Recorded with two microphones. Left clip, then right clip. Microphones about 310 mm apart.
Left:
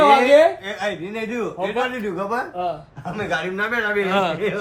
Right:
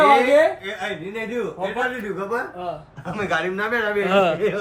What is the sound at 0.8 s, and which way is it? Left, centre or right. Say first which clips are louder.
Speech: left 2 dB; left.